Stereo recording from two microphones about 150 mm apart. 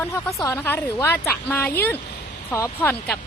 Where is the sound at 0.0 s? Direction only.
20° left (ahead or behind).